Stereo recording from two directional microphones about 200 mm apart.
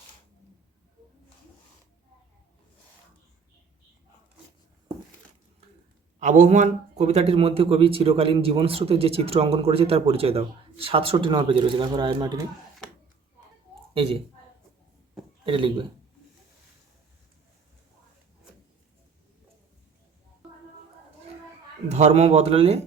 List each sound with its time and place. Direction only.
6.1 s a man's voice: 35° right (ahead or behind); by 12.5 s 20° right (ahead or behind)
13.9 s a woman's voice: 30° right (ahead or behind)
15.4 s a man's voice: 25° right (ahead or behind)
21.8 s a man's voice: 35° right (ahead or behind)